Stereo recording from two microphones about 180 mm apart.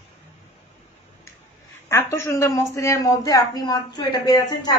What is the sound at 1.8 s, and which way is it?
Speech, 15° left (ahead or behind).